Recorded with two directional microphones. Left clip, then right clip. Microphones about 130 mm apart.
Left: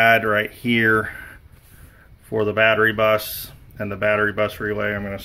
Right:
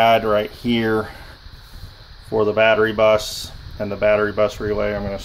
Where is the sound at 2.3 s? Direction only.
40° left (ahead or behind).